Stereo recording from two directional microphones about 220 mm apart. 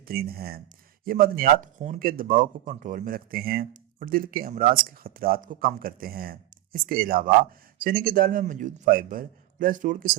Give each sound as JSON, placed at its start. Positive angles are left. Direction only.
{"t": 0.1, "sound": "speech", "side_deg": -45}